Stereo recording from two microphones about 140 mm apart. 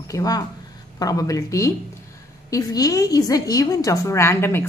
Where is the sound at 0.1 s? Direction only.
25° left (ahead or behind).